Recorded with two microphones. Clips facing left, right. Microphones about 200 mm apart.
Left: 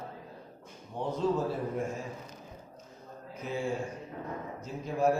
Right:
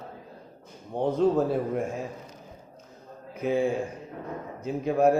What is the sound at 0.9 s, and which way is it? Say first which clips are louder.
Speech: right 8 dB; 55° right (ahead or behind).